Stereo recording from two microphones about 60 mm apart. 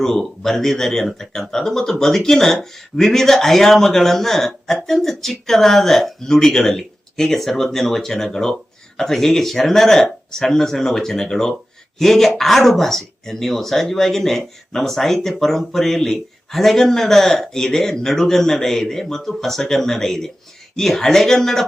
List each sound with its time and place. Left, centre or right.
0.0 s speech: centre